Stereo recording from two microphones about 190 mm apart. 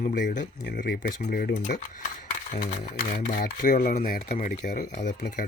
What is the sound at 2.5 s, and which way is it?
Speech, 40° left (ahead or behind).